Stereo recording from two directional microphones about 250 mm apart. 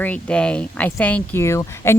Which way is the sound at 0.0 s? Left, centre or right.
Centre.